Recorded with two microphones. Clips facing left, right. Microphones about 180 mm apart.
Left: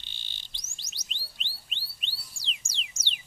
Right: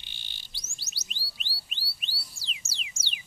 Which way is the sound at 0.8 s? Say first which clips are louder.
Right 1 dB; 5° right (ahead or behind).